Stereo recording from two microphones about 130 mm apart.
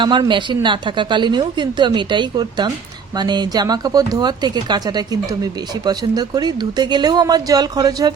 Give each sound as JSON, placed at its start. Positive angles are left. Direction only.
{"t": 0.0, "sound": "speech", "side_deg": -35}